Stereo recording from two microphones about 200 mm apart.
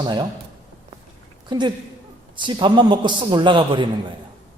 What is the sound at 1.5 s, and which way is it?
A woman's voice, 20° right (ahead or behind).